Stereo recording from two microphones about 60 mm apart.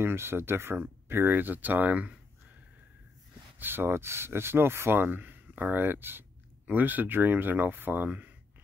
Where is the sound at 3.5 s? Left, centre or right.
Right.